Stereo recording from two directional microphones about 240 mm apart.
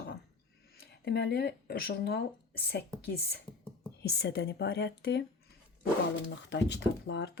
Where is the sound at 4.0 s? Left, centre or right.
Left.